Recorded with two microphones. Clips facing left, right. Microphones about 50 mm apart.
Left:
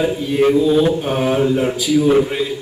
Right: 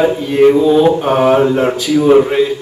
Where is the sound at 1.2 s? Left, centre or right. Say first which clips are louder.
Right 5 dB; right.